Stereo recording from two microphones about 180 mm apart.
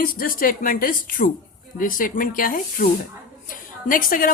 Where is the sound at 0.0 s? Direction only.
55° left (ahead or behind).